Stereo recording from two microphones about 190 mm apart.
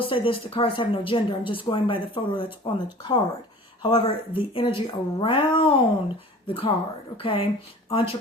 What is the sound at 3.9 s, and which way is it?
Speech, 30° left (ahead or behind).